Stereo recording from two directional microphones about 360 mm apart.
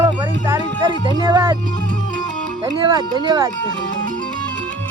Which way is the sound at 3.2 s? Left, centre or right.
Centre.